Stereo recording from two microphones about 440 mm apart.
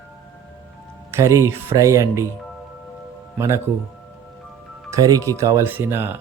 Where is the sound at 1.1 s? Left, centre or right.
Centre.